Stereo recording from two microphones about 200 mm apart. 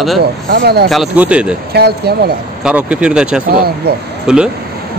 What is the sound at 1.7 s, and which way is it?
Speech, 50° right (ahead or behind).